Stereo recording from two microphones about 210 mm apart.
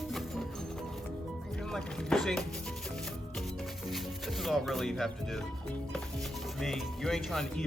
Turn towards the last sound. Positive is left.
turn(degrees=0)  # may be behind; listen again after turning